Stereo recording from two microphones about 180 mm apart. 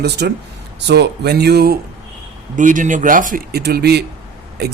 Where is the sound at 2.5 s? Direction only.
45° right (ahead or behind).